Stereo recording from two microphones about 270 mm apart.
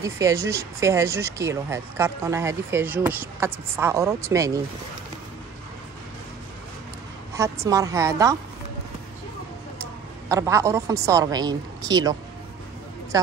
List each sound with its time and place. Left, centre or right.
0.0 s speech: centre
7.6 s speech: centre
10.2 s speech: centre